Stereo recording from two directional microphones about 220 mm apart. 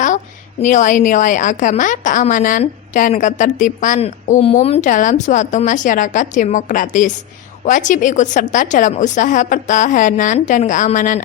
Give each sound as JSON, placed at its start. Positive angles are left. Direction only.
{"t": 0.6, "sound": "a woman's voice", "side_deg": 35}